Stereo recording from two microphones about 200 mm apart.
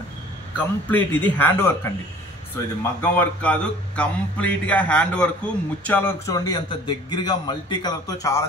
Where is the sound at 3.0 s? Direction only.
10° left (ahead or behind).